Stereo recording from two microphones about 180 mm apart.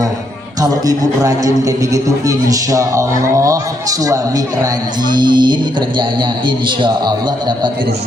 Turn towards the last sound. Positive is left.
turn(degrees=-25)  # may be behind; listen again after turning